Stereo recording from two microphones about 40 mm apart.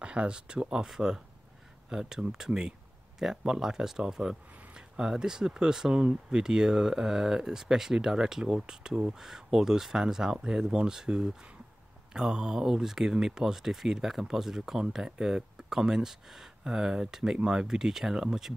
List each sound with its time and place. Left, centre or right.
0.0 s speech: right